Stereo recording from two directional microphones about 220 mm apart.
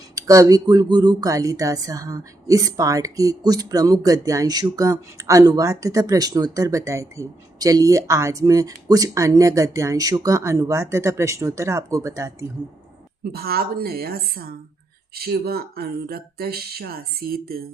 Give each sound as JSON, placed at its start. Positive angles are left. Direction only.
{"t": 0.2, "sound": "speech", "side_deg": -15}
{"t": 13.3, "sound": "speech", "side_deg": -45}